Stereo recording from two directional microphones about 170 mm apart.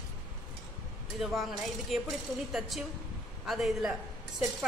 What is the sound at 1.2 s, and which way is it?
A woman's voice, centre (ahead or behind).